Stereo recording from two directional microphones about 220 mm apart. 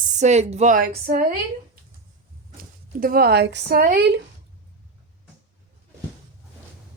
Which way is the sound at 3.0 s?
45° right (ahead or behind).